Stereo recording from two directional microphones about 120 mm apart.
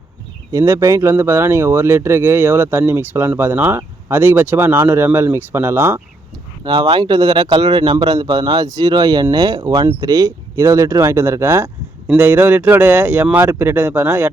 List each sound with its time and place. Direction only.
0.5 s speech: 25° right (ahead or behind)
6.7 s speech: 35° right (ahead or behind); by 14.3 s 15° right (ahead or behind)